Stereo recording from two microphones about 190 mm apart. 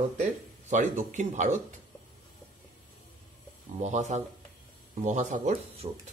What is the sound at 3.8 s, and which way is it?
Speech, 40° right (ahead or behind).